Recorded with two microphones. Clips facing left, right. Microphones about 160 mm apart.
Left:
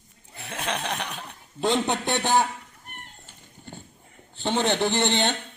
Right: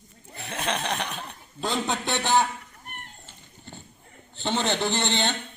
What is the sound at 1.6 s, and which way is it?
Speech, 20° left (ahead or behind).